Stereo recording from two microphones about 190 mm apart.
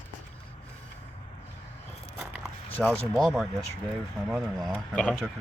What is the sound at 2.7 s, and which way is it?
Speech, 5° left (ahead or behind).